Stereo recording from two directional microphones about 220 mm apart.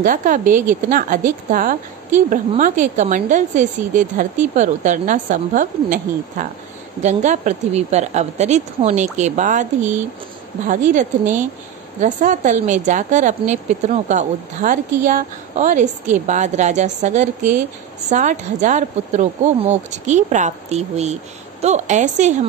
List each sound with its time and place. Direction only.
0.0 s a woman's voice: 40° right (ahead or behind)